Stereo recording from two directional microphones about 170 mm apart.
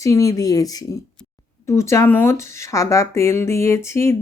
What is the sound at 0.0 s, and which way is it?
Speech, 20° left (ahead or behind).